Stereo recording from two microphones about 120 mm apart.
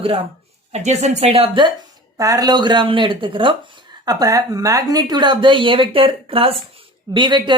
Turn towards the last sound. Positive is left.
turn(degrees=-40)  # may be behind; listen again after turning